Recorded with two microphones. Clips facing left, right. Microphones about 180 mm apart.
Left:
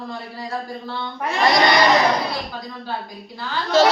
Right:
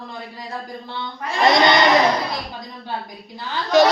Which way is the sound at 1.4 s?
20° right (ahead or behind).